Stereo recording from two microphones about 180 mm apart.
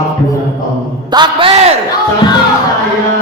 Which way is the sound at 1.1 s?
25° right (ahead or behind).